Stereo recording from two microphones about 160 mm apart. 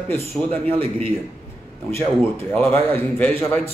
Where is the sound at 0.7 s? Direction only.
35° right (ahead or behind).